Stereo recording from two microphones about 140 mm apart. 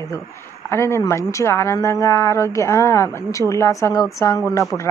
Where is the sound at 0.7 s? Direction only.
20° left (ahead or behind).